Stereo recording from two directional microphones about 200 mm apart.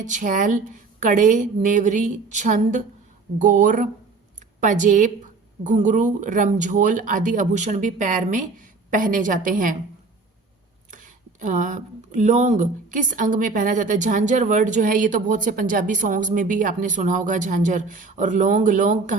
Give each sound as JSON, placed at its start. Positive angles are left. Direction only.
{"t": 0.0, "sound": "speech", "side_deg": -40}
{"t": 10.9, "sound": "speech", "side_deg": -40}